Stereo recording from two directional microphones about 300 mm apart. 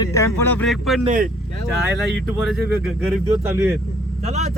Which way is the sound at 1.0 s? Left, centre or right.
Right.